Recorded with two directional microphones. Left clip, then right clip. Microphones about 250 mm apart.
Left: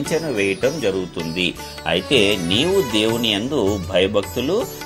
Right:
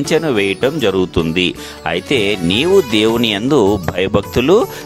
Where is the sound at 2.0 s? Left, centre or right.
Right.